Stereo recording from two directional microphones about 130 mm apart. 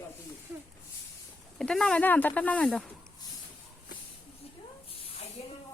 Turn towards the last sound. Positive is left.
turn(degrees=45)  # may be behind; listen again after turning